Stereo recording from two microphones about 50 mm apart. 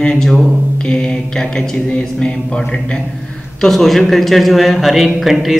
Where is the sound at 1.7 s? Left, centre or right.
Left.